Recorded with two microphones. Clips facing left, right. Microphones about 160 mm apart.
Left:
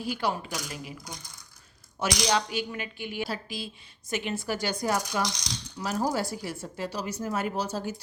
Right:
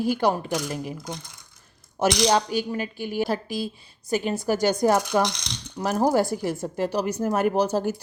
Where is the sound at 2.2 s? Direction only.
40° right (ahead or behind).